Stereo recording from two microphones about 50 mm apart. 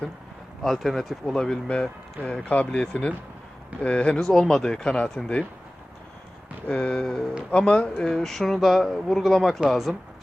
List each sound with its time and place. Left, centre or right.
0.6 s speech: centre
1.3 s speech: centre
2.4 s speech: left
4.2 s speech: centre
6.7 s speech: left
8.1 s speech: centre